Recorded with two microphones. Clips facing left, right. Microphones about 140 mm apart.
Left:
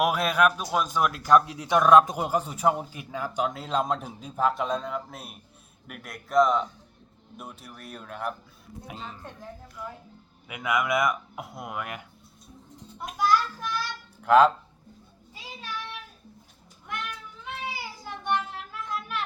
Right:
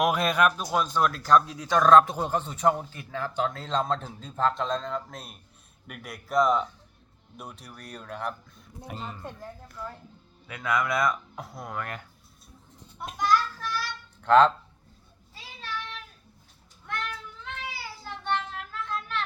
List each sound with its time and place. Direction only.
0.0 s a man's voice: 5° left (ahead or behind)
10.5 s speech: 20° left (ahead or behind)
13.0 s a sound: 10° left (ahead or behind)
15.4 s child singing: 15° left (ahead or behind)
16.8 s cat: 15° left (ahead or behind)